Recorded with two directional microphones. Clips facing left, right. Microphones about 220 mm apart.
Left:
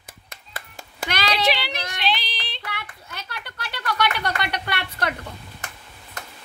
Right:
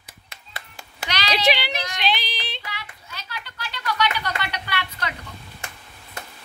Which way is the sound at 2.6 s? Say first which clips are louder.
Left 3 dB; 60° left (ahead or behind).